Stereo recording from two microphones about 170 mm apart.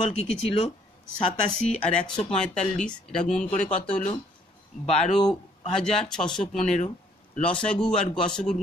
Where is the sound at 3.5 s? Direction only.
50° left (ahead or behind).